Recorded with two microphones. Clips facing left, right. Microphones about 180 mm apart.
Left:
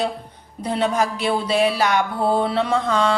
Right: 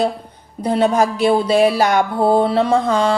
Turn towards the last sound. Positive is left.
turn(degrees=-40)  # may be behind; listen again after turning